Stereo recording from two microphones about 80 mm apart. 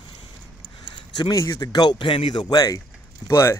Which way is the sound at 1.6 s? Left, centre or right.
Left.